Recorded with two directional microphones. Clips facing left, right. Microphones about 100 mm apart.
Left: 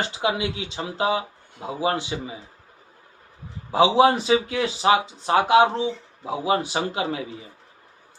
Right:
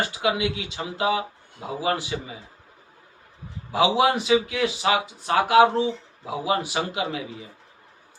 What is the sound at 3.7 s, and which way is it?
A man's voice, 30° left (ahead or behind).